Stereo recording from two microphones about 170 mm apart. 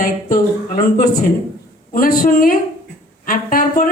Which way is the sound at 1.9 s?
60° left (ahead or behind).